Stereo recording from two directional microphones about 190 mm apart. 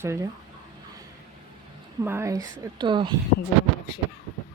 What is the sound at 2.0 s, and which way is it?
A woman's voice, 15° right (ahead or behind).